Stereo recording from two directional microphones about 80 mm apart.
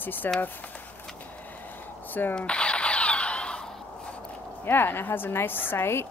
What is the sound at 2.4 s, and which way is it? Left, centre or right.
Drill, centre.